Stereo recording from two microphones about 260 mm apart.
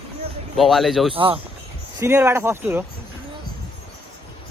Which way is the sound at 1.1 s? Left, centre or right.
Centre.